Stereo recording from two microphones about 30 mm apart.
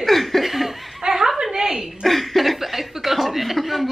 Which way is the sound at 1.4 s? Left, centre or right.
Centre.